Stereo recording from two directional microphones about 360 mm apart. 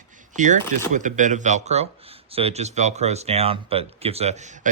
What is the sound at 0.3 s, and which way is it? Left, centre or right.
Speech, right.